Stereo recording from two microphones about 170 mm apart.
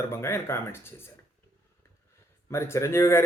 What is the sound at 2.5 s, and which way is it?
Speech, 15° left (ahead or behind).